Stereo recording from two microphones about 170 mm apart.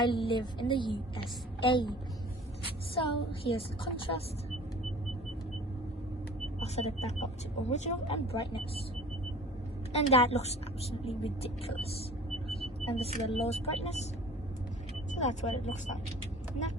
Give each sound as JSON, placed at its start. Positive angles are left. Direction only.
{"t": 0.0, "sound": "a woman's voice", "side_deg": 30}
{"t": 6.6, "sound": "a woman's voice", "side_deg": 40}
{"t": 9.9, "sound": "a woman's voice", "side_deg": 35}
{"t": 15.1, "sound": "speech", "side_deg": 45}